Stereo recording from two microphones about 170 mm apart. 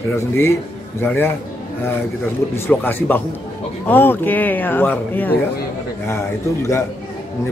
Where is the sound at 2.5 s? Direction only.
15° left (ahead or behind).